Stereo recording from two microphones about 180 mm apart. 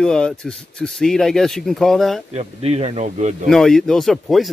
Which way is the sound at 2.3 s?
35° right (ahead or behind).